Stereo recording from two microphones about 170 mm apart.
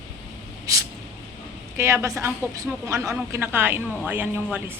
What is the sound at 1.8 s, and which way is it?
A woman's voice, 15° right (ahead or behind).